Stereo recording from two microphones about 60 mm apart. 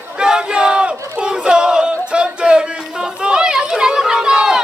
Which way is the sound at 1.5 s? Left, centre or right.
Centre.